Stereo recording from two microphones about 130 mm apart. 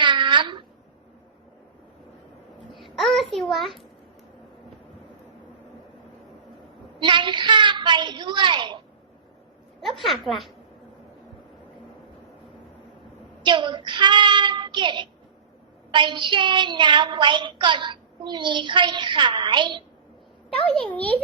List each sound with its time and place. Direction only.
0.0 s a sound: 40° right (ahead or behind)
2.7 s babbling: centre (ahead or behind)
7.0 s a woman's voice: 35° right (ahead or behind)
10.0 s a woman's voice: centre (ahead or behind)
13.4 s a child's voice: 40° right (ahead or behind)
20.7 s a child's voice: 10° left (ahead or behind)